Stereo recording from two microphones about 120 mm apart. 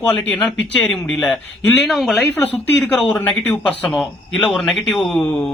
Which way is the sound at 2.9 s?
10° left (ahead or behind).